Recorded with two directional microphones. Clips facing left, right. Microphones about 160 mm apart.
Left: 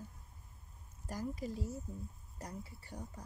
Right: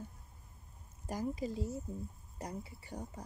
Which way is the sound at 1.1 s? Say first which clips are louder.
Right 3 dB; 20° right (ahead or behind).